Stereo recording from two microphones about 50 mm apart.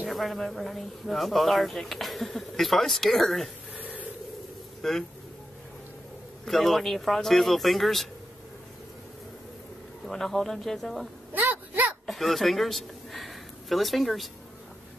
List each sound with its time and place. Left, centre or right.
0.1 s speech: centre
3.7 s a sound: right
4.8 s speech: centre
6.4 s speech: centre
10.0 s speech: centre
11.3 s a sound: right
12.1 s speech: centre